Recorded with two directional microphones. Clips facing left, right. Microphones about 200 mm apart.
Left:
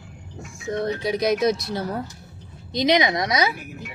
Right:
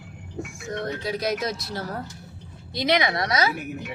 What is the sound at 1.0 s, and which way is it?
A woman's voice, 15° left (ahead or behind).